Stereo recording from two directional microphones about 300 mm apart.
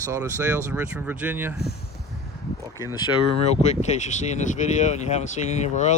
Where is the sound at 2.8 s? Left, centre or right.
Centre.